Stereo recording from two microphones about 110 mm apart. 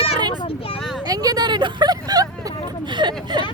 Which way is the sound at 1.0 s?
35° right (ahead or behind).